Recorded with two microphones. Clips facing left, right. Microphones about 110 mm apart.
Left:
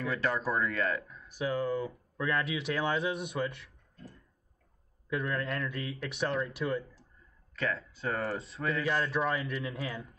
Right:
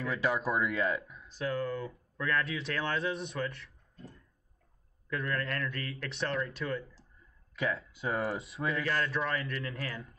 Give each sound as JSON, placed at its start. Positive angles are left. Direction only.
{"t": 0.2, "sound": "speech", "side_deg": -10}
{"t": 1.5, "sound": "speech", "side_deg": 25}
{"t": 2.1, "sound": "speech", "side_deg": 15}
{"t": 2.4, "sound": "speech", "side_deg": 5}
{"t": 5.1, "sound": "a man's voice", "side_deg": 10}
{"t": 7.5, "sound": "speech", "side_deg": -10}
{"t": 9.2, "sound": "a man's voice", "side_deg": 10}